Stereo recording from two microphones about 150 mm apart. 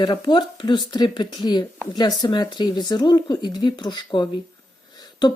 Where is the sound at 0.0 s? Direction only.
30° left (ahead or behind).